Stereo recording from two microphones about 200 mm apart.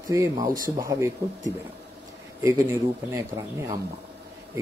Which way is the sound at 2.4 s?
15° right (ahead or behind).